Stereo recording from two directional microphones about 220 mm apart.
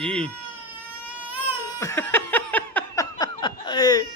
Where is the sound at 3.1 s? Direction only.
20° left (ahead or behind).